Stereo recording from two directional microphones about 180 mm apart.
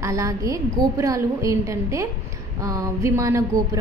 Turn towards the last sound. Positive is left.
turn(degrees=-15)  # may be behind; listen again after turning